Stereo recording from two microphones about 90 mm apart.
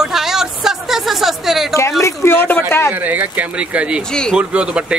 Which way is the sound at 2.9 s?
20° right (ahead or behind).